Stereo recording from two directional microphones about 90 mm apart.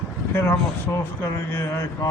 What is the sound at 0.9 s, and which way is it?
A man's voice, 25° left (ahead or behind).